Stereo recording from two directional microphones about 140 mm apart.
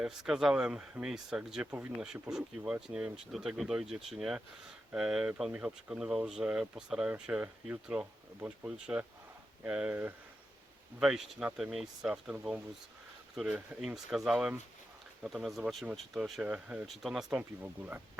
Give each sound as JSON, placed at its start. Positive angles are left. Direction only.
{"t": 0.0, "sound": "speech", "side_deg": -5}